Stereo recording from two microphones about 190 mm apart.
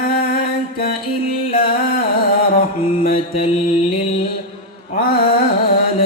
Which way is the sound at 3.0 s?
50° left (ahead or behind).